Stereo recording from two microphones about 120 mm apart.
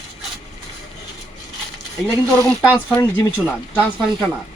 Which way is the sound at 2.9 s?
15° left (ahead or behind).